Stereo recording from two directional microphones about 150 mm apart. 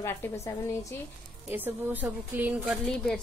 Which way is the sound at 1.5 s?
10° right (ahead or behind).